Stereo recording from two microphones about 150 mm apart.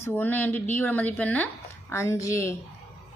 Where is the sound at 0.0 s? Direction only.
15° left (ahead or behind).